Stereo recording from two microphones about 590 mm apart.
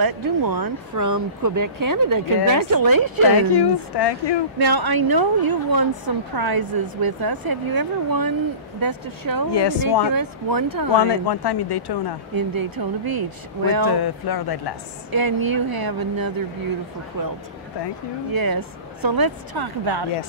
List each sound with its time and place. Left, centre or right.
0.0 s a woman's voice: right
3.5 s speech: left
4.6 s a woman's voice: right
9.5 s speech: left
10.0 s a woman's voice: right
11.0 s speech: left
12.4 s a woman's voice: right
13.9 s speech: left
15.0 s a woman's voice: right